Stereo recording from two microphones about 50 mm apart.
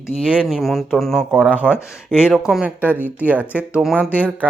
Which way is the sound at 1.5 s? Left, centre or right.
Right.